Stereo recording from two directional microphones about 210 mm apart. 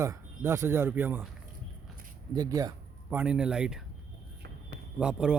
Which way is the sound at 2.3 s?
15° right (ahead or behind).